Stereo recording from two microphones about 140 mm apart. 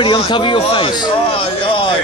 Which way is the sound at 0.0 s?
35° left (ahead or behind).